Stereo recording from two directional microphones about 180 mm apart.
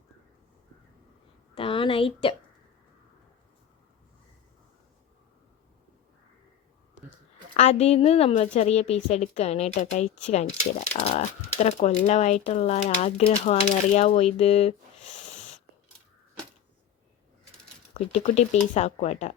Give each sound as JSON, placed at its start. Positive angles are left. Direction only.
{"t": 1.5, "sound": "speech", "side_deg": 30}
{"t": 7.5, "sound": "speech", "side_deg": 35}
{"t": 17.9, "sound": "speech", "side_deg": 40}